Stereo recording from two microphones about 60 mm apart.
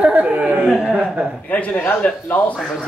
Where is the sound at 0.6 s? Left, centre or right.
Centre.